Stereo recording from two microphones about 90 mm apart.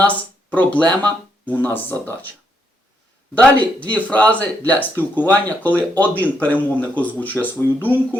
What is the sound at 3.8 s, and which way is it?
Speech, 15° left (ahead or behind).